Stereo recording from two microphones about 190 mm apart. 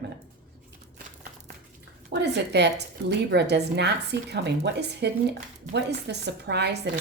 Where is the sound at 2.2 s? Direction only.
65° right (ahead or behind).